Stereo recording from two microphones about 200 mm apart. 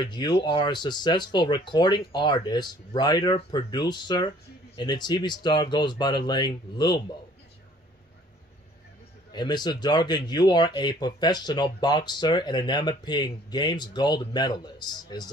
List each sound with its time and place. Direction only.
0.0 s speech: 20° left (ahead or behind)
9.3 s speech: 20° left (ahead or behind)